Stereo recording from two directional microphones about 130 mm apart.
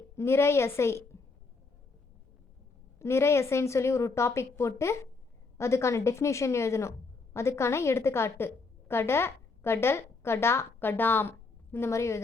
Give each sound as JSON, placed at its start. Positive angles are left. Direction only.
{"t": 0.2, "sound": "a woman's voice", "side_deg": 20}
{"t": 3.0, "sound": "a woman's voice", "side_deg": 20}